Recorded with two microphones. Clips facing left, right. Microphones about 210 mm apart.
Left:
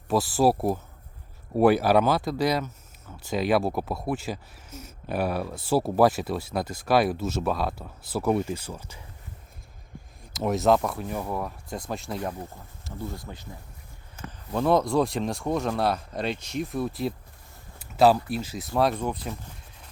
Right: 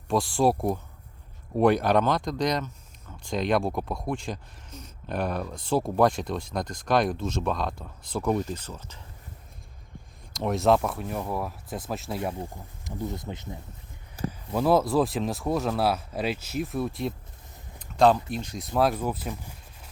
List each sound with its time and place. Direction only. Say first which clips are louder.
0.1 s speech: left 1 dB; 5° left (ahead or behind)
10.3 s speech: left 1 dB; centre (ahead or behind)
12.3 s speech: right 2 dB; 20° right (ahead or behind)
14.3 s speech: even; 5° right (ahead or behind)
17.7 s a sound: left 1 dB; 5° left (ahead or behind)
18.3 s speech: left 2 dB; 5° left (ahead or behind)